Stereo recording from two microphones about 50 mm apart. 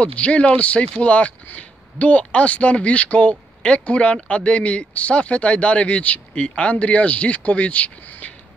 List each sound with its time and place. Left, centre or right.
0.0 s speech: left